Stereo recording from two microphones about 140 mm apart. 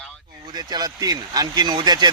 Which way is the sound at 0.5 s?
25° right (ahead or behind).